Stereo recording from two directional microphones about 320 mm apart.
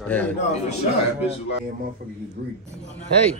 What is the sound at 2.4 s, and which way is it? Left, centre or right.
Speech, right.